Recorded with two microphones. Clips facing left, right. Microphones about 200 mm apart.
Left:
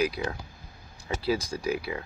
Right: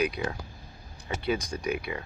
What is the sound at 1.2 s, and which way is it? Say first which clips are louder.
Speech: left 1 dB; 30° left (ahead or behind).